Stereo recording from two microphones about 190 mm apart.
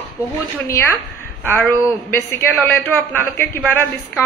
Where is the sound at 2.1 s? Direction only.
10° left (ahead or behind).